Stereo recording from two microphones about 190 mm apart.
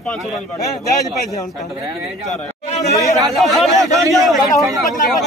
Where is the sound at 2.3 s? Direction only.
40° left (ahead or behind).